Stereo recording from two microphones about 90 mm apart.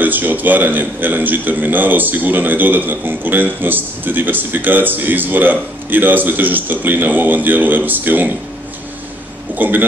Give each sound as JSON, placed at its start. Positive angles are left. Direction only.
{"t": 0.0, "sound": "a man's voice", "side_deg": -20}
{"t": 9.6, "sound": "a man's voice", "side_deg": -20}